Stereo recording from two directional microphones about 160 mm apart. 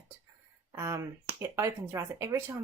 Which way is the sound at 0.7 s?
15° right (ahead or behind).